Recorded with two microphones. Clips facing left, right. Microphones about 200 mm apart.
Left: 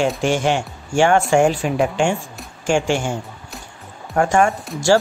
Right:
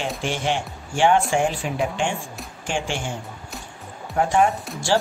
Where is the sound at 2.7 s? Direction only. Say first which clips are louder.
Left 8 dB; 45° left (ahead or behind).